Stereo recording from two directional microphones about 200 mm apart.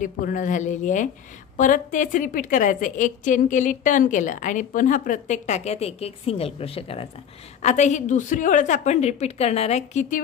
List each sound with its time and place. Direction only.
0.0 s a woman's voice: 40° left (ahead or behind)